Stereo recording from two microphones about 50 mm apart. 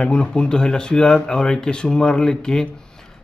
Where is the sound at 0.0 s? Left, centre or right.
Left.